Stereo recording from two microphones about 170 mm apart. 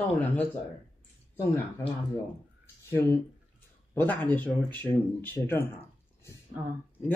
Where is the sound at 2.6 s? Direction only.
15° left (ahead or behind).